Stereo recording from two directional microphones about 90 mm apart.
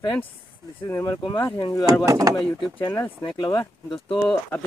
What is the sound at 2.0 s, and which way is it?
Speech, 40° right (ahead or behind).